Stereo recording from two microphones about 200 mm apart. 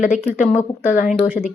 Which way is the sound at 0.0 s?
40° left (ahead or behind).